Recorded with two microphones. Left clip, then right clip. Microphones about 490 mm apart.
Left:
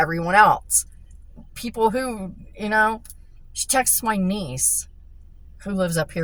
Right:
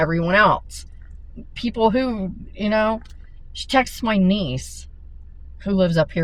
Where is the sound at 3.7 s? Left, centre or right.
Left.